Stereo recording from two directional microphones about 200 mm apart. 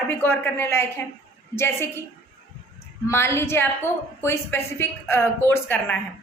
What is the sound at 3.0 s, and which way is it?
A woman's voice, 10° left (ahead or behind).